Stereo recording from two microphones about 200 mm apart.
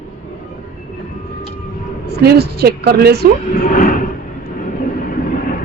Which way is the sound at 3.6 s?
45° left (ahead or behind).